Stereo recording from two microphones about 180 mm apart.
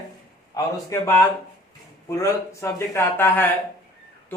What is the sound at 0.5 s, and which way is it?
Speech, 15° left (ahead or behind).